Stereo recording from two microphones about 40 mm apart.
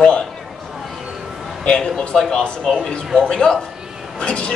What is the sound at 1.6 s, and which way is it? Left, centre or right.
Speech, left.